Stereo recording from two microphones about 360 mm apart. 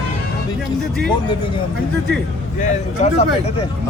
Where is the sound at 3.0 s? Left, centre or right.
Centre.